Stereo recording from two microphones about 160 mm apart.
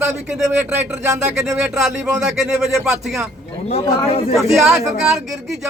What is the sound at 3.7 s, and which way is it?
Speech, 40° left (ahead or behind).